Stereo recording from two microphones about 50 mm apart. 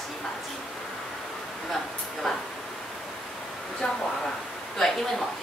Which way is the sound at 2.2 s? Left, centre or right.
Centre.